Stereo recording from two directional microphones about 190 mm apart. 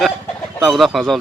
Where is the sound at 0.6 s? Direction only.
Centre (ahead or behind).